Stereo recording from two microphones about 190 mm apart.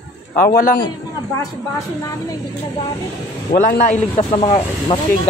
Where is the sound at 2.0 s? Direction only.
15° left (ahead or behind).